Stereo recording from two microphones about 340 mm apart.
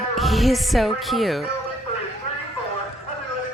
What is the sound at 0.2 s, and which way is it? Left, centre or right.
Speech, centre.